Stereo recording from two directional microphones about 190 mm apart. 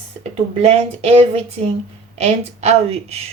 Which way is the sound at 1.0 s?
35° right (ahead or behind).